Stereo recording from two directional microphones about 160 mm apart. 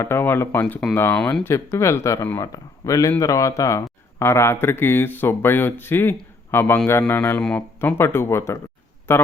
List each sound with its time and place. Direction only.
0.0 s speech: 15° left (ahead or behind)